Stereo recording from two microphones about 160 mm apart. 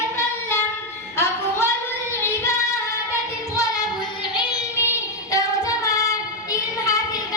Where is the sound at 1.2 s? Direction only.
15° left (ahead or behind).